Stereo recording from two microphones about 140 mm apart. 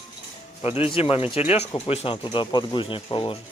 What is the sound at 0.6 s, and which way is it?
Speech, 45° left (ahead or behind).